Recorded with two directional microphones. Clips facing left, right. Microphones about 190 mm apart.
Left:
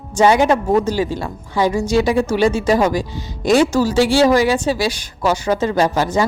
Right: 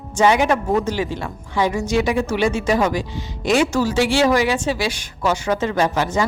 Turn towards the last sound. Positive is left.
turn(degrees=35)  # may be behind; listen again after turning